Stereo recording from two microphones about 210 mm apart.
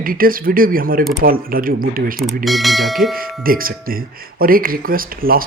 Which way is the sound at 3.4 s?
45° right (ahead or behind).